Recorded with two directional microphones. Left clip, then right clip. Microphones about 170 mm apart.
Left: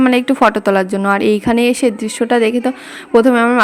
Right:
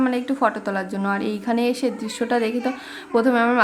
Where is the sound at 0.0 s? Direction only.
50° left (ahead or behind).